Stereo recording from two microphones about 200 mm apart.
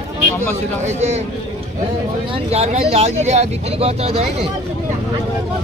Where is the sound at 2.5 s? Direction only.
30° right (ahead or behind).